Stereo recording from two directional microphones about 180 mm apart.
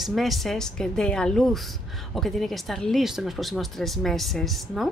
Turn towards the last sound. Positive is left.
turn(degrees=0)  # may be behind; listen again after turning